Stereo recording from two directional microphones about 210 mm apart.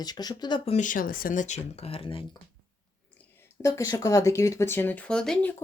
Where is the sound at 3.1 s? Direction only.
10° left (ahead or behind).